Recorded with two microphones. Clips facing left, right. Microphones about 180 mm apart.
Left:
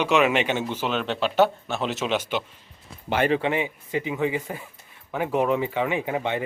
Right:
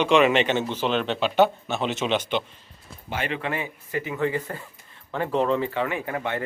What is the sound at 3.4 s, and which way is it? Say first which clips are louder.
Speech: left 4 dB; 20° left (ahead or behind).